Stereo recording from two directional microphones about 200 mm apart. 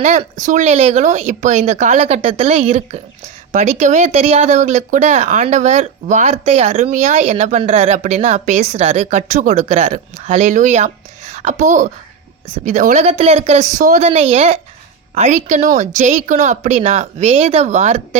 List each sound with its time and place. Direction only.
0.0 s speech: 35° right (ahead or behind)